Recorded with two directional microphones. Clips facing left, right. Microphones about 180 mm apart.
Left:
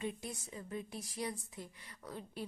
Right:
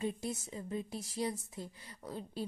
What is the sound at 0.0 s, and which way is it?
Speech, 30° right (ahead or behind).